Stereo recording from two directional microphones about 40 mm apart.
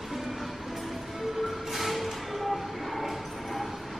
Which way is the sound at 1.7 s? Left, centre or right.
Centre.